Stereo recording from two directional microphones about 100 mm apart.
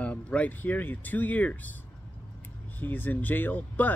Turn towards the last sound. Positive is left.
turn(degrees=15)  # may be behind; listen again after turning